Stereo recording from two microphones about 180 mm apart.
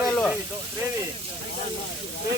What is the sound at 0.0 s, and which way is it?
Snake, centre (ahead or behind).